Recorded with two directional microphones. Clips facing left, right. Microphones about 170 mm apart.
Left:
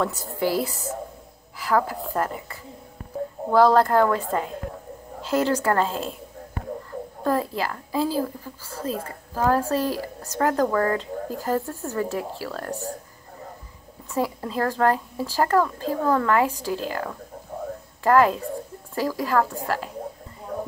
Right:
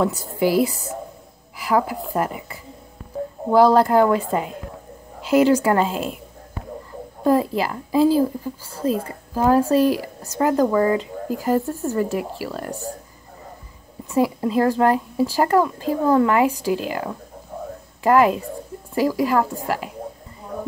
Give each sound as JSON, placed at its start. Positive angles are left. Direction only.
{"t": 0.0, "sound": "speech", "side_deg": -10}
{"t": 7.2, "sound": "speech", "side_deg": -15}
{"t": 14.1, "sound": "speech", "side_deg": -10}